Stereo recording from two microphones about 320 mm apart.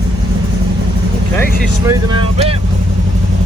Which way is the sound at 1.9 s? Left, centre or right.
Centre.